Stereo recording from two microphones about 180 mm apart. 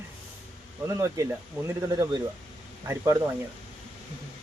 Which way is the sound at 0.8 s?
15° right (ahead or behind).